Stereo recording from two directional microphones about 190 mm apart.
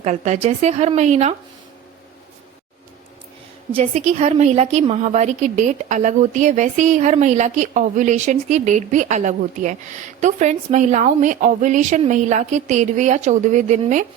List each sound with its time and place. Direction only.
0.0 s speech: 35° right (ahead or behind)
3.9 s speech: 35° right (ahead or behind)